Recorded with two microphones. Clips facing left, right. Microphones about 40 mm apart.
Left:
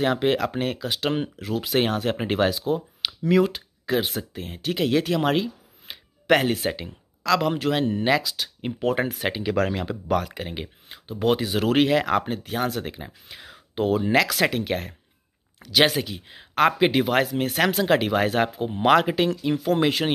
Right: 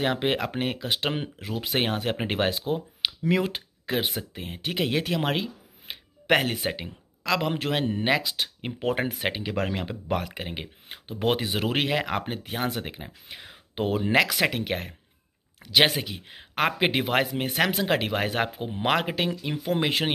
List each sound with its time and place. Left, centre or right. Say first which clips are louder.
0.0 s speech: left 4 dB; centre
1.1 s speech: left 5 dB; centre
2.5 s speech: left 3 dB; right
3.5 s a sound: left 4 dB; right
4.2 s speech: left 2 dB; right
10.9 s speech: left 3 dB; right; by 13.6 s centre
13.7 s speech: left 2 dB; right